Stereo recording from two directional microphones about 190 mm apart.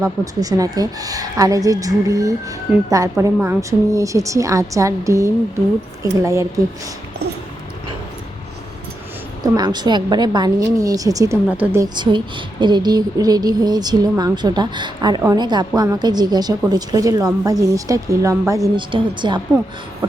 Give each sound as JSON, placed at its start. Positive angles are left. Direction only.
{"t": 0.0, "sound": "a woman's voice", "side_deg": -20}
{"t": 9.4, "sound": "a woman's voice", "side_deg": -20}
{"t": 11.4, "sound": "a woman's voice", "side_deg": -10}
{"t": 11.9, "sound": "a woman's voice", "side_deg": -25}